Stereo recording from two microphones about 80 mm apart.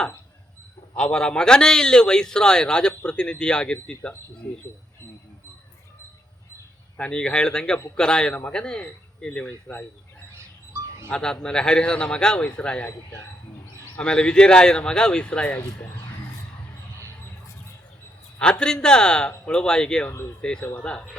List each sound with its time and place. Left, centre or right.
0.9 s a man's voice: centre
6.9 s a man's voice: centre
11.1 s a man's voice: centre
14.0 s a man's voice: centre
18.6 s a man's voice: centre